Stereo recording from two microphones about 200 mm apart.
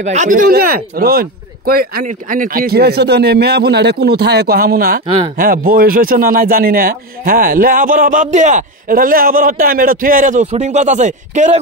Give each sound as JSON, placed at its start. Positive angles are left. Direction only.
{"t": 0.0, "sound": "a man's voice", "side_deg": -35}
{"t": 5.0, "sound": "speech", "side_deg": -25}
{"t": 5.4, "sound": "a man's voice", "side_deg": -45}